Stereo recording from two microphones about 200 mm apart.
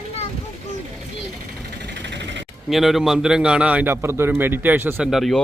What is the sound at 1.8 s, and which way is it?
Vehicle, 60° right (ahead or behind).